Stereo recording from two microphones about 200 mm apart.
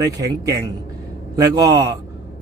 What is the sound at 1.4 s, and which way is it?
Speech, 15° right (ahead or behind).